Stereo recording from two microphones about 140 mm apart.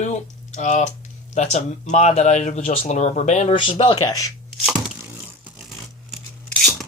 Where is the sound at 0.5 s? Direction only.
60° left (ahead or behind).